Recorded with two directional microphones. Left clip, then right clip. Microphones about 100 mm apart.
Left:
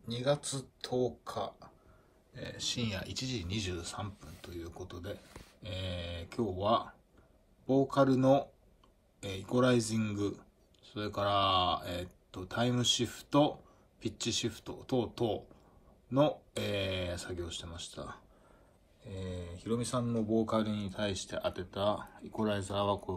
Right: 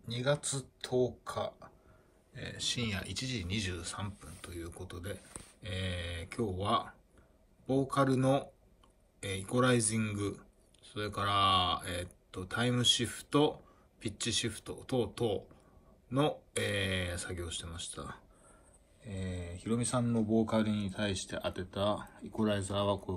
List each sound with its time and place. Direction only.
0.0 s a man's voice: 25° left (ahead or behind)